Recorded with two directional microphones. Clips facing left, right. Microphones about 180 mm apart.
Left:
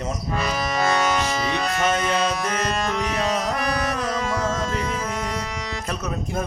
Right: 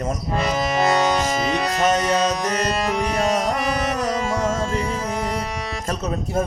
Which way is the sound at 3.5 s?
25° right (ahead or behind).